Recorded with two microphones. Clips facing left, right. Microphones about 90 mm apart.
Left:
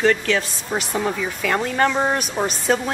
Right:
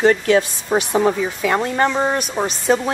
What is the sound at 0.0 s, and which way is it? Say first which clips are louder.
Speech: right 4 dB; 20° right (ahead or behind).